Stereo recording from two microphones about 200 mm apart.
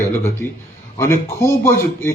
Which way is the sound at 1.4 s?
15° left (ahead or behind).